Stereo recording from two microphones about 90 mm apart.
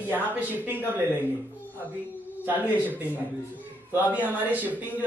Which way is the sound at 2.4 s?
20° right (ahead or behind).